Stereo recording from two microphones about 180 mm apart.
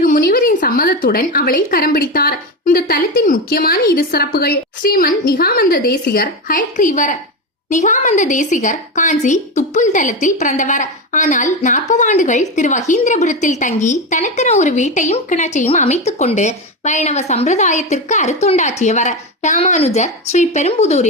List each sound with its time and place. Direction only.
0.0 s a woman's voice: 55° left (ahead or behind); by 21.1 s 35° left (ahead or behind)